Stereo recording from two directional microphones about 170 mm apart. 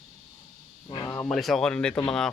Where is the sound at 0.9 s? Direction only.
15° left (ahead or behind).